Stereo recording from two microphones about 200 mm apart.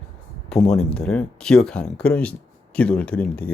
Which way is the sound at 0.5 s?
Centre (ahead or behind).